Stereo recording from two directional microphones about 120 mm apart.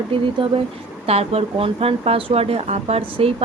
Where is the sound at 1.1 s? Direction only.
55° right (ahead or behind).